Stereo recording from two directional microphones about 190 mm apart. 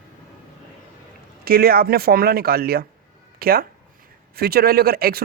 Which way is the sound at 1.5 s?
50° right (ahead or behind).